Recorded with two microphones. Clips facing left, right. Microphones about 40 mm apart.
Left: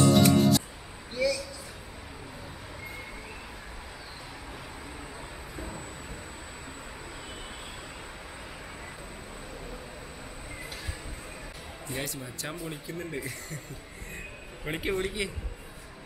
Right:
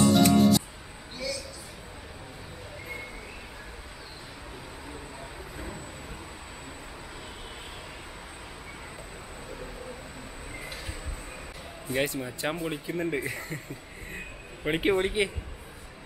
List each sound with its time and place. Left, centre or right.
0.0 s music: centre
11.9 s speech: right
14.1 s a sound: right